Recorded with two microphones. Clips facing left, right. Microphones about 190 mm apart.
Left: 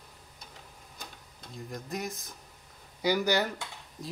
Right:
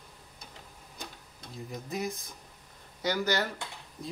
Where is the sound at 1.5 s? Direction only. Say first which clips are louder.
Even; centre (ahead or behind).